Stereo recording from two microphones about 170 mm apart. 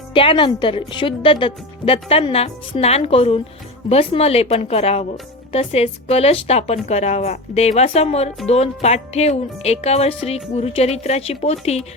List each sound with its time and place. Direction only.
0.1 s a woman's voice: 30° left (ahead or behind)